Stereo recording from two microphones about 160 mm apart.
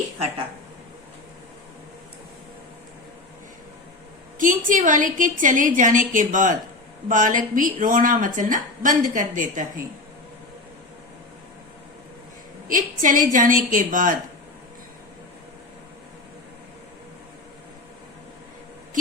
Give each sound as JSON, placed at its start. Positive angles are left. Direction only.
{"t": 4.4, "sound": "a woman's voice", "side_deg": -55}
{"t": 12.6, "sound": "a woman's voice", "side_deg": -55}